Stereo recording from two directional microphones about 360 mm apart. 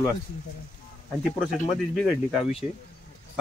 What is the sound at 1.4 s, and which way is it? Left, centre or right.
Speech, centre.